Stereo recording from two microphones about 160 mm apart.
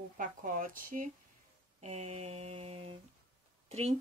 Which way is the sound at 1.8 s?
45° right (ahead or behind).